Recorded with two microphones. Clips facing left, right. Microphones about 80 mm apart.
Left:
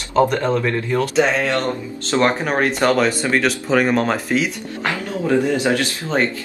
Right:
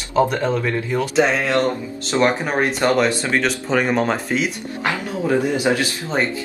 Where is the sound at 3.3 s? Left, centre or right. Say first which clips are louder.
Left 2 dB; centre.